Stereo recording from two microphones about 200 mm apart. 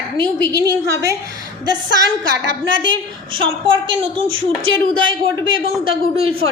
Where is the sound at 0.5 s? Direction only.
15° right (ahead or behind).